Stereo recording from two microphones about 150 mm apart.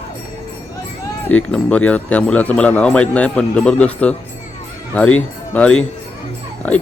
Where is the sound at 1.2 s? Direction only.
10° left (ahead or behind).